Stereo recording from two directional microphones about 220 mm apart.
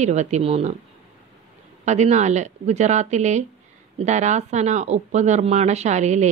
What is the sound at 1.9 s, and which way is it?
Speech, 30° right (ahead or behind).